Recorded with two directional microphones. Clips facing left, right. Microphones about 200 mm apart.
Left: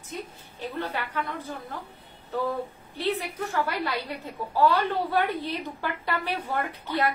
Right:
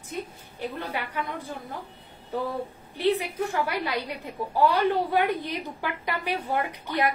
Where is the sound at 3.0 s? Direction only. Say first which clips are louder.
Right 4 dB; 15° right (ahead or behind).